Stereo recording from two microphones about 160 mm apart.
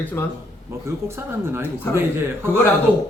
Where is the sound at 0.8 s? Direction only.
15° right (ahead or behind).